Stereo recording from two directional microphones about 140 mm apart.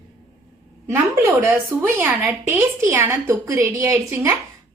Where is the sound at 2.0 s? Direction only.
15° right (ahead or behind).